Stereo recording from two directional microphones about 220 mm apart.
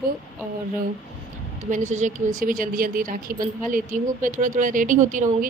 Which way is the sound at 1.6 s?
35° right (ahead or behind).